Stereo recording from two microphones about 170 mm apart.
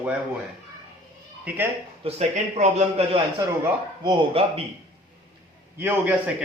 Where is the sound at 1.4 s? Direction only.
10° right (ahead or behind).